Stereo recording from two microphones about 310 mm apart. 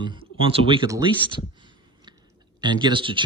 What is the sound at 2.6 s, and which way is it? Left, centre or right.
Speech, centre.